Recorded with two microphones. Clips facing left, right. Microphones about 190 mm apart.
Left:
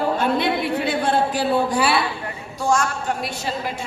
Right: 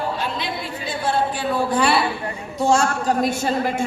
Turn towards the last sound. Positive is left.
turn(degrees=-50)  # may be behind; listen again after turning